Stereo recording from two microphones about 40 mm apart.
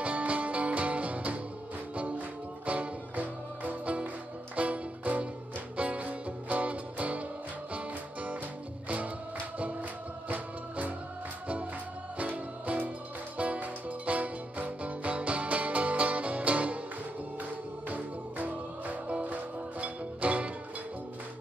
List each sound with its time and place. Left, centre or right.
0.0 s music: right
12.2 s music: right